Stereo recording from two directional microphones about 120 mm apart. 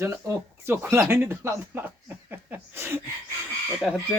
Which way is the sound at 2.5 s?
20° right (ahead or behind).